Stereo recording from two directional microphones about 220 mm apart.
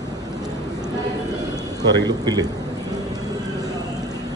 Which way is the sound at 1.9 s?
20° right (ahead or behind).